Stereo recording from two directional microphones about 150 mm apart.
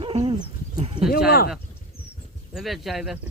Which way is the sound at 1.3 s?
90° left.